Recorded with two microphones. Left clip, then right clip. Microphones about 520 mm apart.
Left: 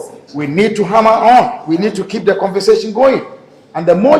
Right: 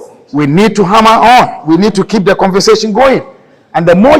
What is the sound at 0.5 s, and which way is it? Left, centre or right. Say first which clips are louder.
A man's voice: right 3 dB; right.